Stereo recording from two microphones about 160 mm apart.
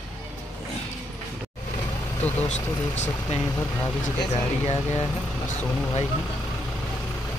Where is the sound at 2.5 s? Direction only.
45° left (ahead or behind).